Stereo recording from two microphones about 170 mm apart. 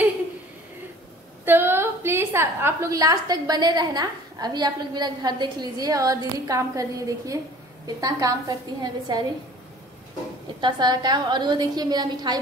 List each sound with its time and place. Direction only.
1.4 s a woman's voice: 10° right (ahead or behind)
10.6 s a woman's voice: 25° right (ahead or behind)